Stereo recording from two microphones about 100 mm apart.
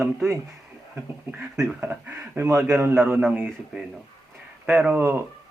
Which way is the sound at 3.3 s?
10° right (ahead or behind).